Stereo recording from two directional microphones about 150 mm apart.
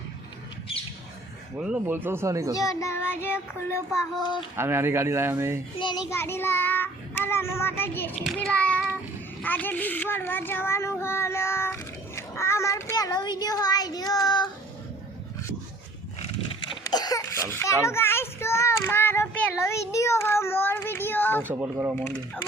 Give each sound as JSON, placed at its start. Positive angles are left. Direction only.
{"t": 1.5, "sound": "speech", "side_deg": -5}
{"t": 2.0, "sound": "speech", "side_deg": -20}
{"t": 2.6, "sound": "child singing", "side_deg": 20}
{"t": 4.2, "sound": "a child's voice", "side_deg": 30}
{"t": 4.5, "sound": "speech", "side_deg": -15}
{"t": 6.1, "sound": "child singing", "side_deg": 15}
{"t": 9.4, "sound": "a child's voice", "side_deg": 10}
{"t": 16.9, "sound": "a sound", "side_deg": 25}
{"t": 17.5, "sound": "a child's voice", "side_deg": 15}
{"t": 21.4, "sound": "speech", "side_deg": -15}